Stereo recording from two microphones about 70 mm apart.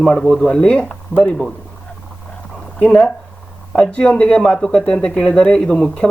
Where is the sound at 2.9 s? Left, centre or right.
Centre.